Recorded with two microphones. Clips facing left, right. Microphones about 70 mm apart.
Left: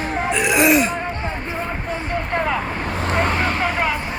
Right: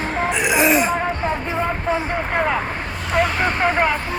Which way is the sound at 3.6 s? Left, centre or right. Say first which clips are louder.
Right 3 dB; right.